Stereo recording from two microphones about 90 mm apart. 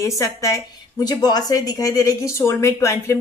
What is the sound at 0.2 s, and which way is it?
A woman's voice, 35° left (ahead or behind).